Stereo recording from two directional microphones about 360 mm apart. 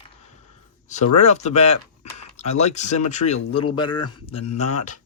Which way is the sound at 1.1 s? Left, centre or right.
Centre.